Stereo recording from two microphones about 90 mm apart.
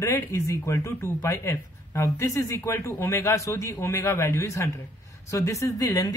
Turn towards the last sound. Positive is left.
turn(degrees=40)  # may be behind; listen again after turning